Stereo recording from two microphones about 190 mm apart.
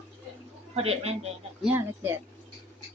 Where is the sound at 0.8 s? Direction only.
30° right (ahead or behind).